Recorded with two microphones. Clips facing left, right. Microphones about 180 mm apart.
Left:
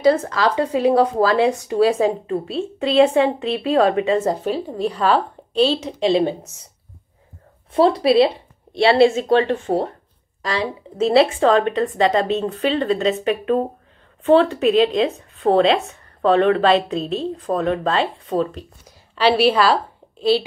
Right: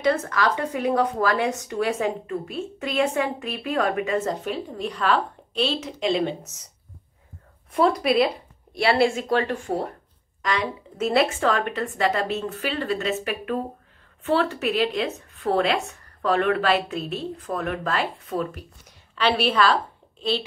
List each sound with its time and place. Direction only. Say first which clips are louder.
0.0 s speech: left 6 dB; 30° left (ahead or behind)
7.7 s a woman's voice: left 6 dB; 30° left (ahead or behind)
15.4 s a woman's voice: left 7 dB; 30° left (ahead or behind)